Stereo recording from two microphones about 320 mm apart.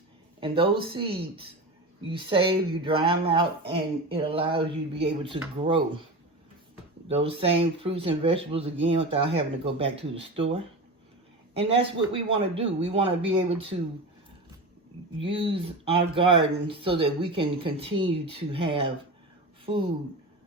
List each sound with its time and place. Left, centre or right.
0.3 s speech: centre
7.1 s speech: centre
15.2 s speech: centre